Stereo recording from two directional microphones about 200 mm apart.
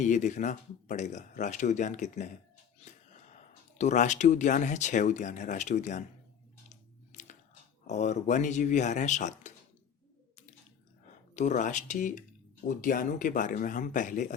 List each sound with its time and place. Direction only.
0.0 s speech: 35° left (ahead or behind)
6.7 s a sound: 35° left (ahead or behind)
7.9 s speech: 35° left (ahead or behind)
11.3 s speech: 35° left (ahead or behind)